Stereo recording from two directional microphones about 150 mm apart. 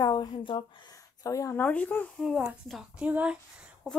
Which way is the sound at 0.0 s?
30° left (ahead or behind).